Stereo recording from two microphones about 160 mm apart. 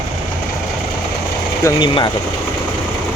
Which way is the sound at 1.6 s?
30° left (ahead or behind).